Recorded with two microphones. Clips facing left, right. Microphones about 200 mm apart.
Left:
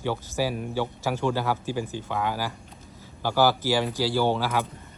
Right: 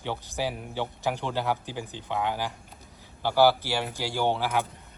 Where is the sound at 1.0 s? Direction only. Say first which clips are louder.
Left 2 dB; 15° right (ahead or behind).